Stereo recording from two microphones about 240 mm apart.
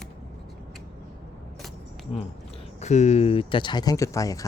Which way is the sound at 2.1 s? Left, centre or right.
Left.